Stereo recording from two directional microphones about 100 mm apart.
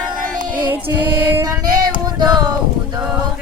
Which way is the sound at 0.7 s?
20° right (ahead or behind).